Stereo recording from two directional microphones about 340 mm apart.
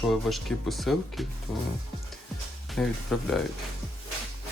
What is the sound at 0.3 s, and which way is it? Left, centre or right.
Speech, centre.